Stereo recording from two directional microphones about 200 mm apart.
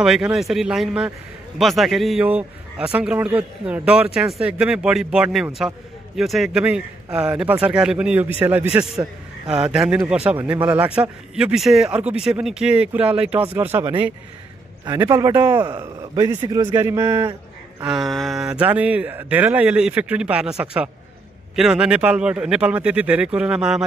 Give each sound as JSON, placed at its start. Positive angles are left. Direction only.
{"t": 0.0, "sound": "a man's voice", "side_deg": 0}
{"t": 17.8, "sound": "speech", "side_deg": 0}